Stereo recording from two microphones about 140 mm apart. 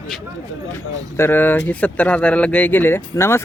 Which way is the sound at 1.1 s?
15° left (ahead or behind).